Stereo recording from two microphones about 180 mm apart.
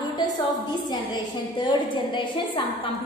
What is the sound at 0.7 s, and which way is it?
A woman's voice, 25° left (ahead or behind).